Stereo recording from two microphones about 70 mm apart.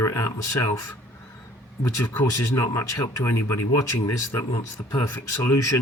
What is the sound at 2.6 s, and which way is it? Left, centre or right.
Speech, left.